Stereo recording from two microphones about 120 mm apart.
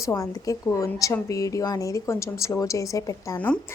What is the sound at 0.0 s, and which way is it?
A woman's voice, 25° left (ahead or behind).